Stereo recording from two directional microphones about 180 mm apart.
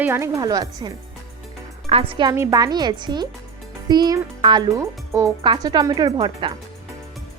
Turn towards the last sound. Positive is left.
turn(degrees=-25)  # may be behind; listen again after turning